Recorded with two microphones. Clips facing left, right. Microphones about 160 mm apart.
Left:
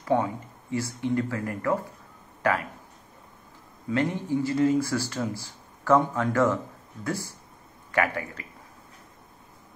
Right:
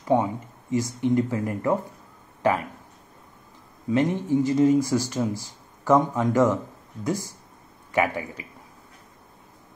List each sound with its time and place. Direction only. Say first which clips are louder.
0.0 s speech: right 3 dB; 15° right (ahead or behind)
3.9 s speech: right 4 dB; 20° right (ahead or behind)